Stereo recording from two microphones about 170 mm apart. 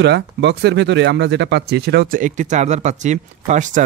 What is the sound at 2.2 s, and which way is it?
Speech, 50° right (ahead or behind).